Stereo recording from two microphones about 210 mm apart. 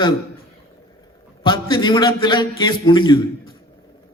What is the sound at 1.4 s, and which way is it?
A man's voice, 20° left (ahead or behind).